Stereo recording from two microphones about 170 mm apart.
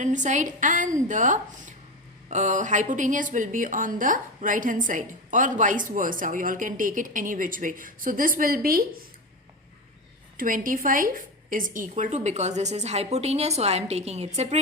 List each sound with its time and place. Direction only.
0.0 s a woman's voice: 45° right (ahead or behind)
10.3 s a woman's voice: 50° right (ahead or behind)